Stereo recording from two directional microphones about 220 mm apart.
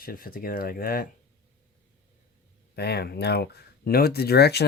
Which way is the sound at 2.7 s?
45° left (ahead or behind).